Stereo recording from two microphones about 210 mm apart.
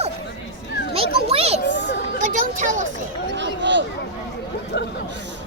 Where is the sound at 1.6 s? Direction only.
55° left (ahead or behind).